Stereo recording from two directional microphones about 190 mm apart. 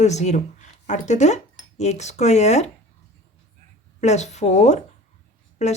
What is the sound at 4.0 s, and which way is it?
Speech, 35° left (ahead or behind).